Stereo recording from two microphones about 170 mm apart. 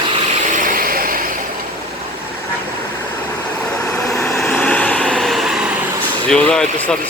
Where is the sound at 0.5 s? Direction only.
55° right (ahead or behind).